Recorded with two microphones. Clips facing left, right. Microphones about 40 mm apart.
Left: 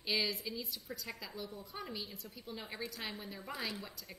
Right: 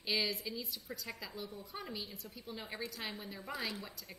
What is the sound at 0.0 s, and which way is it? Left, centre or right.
A woman's voice, centre.